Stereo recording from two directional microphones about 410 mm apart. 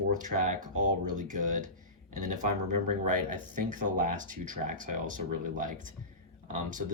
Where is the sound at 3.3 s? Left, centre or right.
Centre.